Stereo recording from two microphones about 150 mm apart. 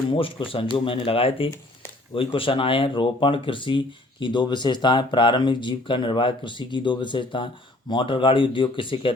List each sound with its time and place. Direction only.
0.1 s speech: 35° left (ahead or behind)